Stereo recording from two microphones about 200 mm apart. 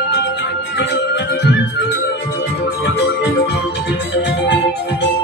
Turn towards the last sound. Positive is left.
turn(degrees=60)  # may be behind; listen again after turning